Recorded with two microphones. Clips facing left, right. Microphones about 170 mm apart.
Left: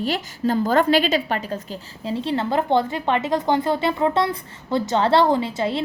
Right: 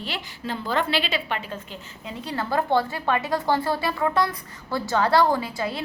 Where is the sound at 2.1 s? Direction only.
30° left (ahead or behind).